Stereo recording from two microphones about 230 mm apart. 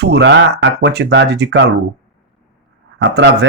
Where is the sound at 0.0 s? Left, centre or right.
Right.